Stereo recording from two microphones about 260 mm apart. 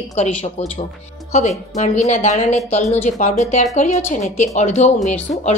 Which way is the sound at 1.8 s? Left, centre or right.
Left.